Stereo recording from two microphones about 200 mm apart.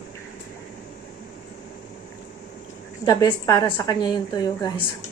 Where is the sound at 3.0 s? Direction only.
20° left (ahead or behind).